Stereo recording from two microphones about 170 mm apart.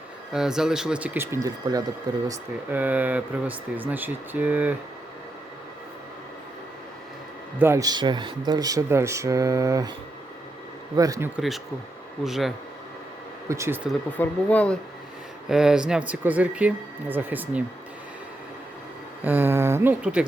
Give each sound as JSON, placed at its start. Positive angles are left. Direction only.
{"t": 0.3, "sound": "speech", "side_deg": -5}
{"t": 2.6, "sound": "speech", "side_deg": -10}
{"t": 7.6, "sound": "speech", "side_deg": -15}
{"t": 10.9, "sound": "speech", "side_deg": -20}
{"t": 11.3, "sound": "speech", "side_deg": 0}
{"t": 13.5, "sound": "speech", "side_deg": -15}
{"t": 14.2, "sound": "speech", "side_deg": 10}
{"t": 15.4, "sound": "speech", "side_deg": -5}
{"t": 19.2, "sound": "speech", "side_deg": -10}